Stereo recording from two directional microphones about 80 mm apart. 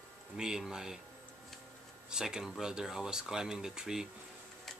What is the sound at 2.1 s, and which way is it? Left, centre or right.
Speech, centre.